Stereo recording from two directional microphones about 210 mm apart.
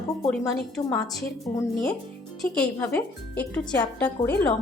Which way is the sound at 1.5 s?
10° left (ahead or behind).